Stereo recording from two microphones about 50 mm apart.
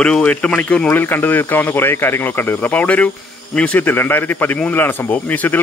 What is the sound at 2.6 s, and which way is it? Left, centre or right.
Speech, left.